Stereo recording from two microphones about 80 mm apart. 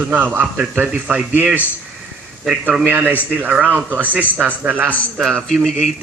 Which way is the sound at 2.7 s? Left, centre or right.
Centre.